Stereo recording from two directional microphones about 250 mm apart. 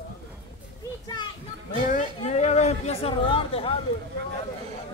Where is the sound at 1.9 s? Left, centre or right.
Left.